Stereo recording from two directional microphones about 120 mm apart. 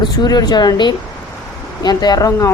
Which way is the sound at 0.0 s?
35° left (ahead or behind).